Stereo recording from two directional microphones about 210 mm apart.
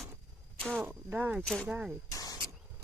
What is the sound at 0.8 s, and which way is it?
Speech, 10° right (ahead or behind).